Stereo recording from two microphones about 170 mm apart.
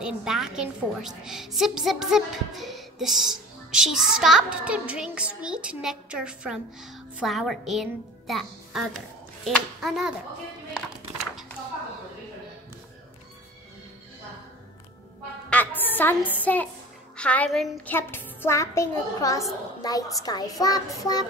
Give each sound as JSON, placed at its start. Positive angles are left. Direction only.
{"t": 0.0, "sound": "a woman's voice", "side_deg": -5}
{"t": 15.5, "sound": "a sound", "side_deg": 10}
{"t": 16.3, "sound": "a child's voice", "side_deg": 10}
{"t": 20.2, "sound": "child singing", "side_deg": 20}